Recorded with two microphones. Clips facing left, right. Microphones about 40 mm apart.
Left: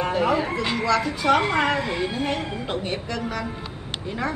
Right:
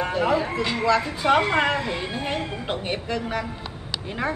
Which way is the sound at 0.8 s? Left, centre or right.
Right.